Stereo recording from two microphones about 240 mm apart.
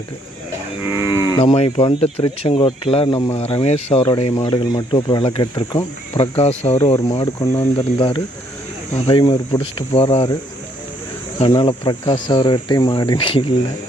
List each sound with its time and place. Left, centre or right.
0.8 s cattle: centre
1.3 s speech: centre
11.3 s speech: centre